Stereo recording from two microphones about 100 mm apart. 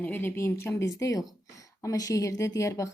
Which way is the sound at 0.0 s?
20° left (ahead or behind).